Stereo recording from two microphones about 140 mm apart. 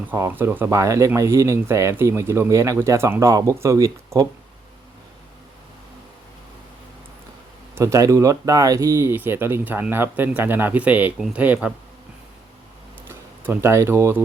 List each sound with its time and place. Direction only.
0.1 s speech: 15° right (ahead or behind)
7.8 s speech: 20° right (ahead or behind)
13.1 s speech: 15° right (ahead or behind)